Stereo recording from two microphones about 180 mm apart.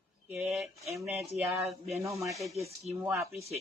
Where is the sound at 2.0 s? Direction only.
15° right (ahead or behind).